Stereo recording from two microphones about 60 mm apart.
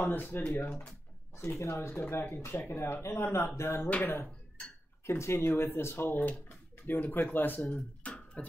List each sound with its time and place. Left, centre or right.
0.0 s speech: left
1.3 s speech: left
1.9 s speech: left
5.0 s speech: left
8.4 s beatboxing: left